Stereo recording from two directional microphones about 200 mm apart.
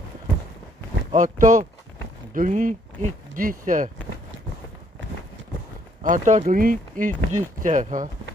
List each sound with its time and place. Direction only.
1.1 s speech: 40° right (ahead or behind)
6.0 s speech: 40° right (ahead or behind)